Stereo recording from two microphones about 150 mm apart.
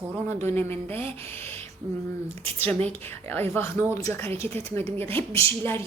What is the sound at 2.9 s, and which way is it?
Speech, 15° left (ahead or behind).